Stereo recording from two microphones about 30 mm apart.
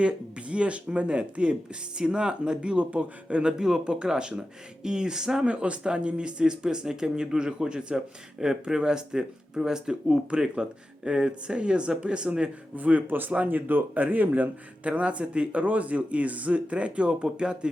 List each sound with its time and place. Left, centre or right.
0.0 s speech: right
5.5 s speech: right
12.7 s speech: right
14.8 s speech: right
15.6 s speech: right